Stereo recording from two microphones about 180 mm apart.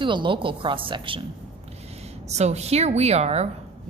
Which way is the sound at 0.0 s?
25° right (ahead or behind).